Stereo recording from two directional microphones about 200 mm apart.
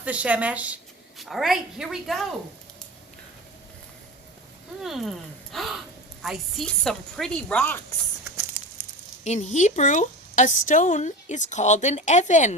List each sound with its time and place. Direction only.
0.0 s speech: 5° right (ahead or behind)
4.8 s speech: centre (ahead or behind)
9.2 s speech: 35° left (ahead or behind)